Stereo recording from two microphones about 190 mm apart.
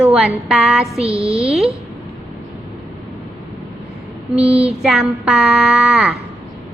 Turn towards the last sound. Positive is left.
turn(degrees=0)  # may be behind; listen again after turning